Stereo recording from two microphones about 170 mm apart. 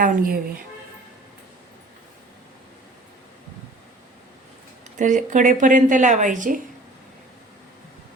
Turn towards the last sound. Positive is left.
turn(degrees=-50)  # may be behind; listen again after turning